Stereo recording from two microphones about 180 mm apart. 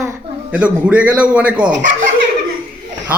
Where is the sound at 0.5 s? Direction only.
5° right (ahead or behind).